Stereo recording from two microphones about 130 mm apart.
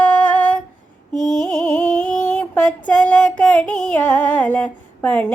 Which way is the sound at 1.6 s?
10° left (ahead or behind).